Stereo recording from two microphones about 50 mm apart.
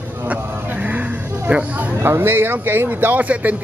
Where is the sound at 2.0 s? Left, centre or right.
Right.